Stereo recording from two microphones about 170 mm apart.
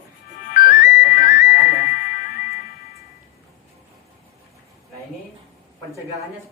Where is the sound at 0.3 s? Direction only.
50° left (ahead or behind).